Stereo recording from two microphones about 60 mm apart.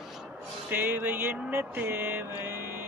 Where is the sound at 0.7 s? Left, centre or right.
Right.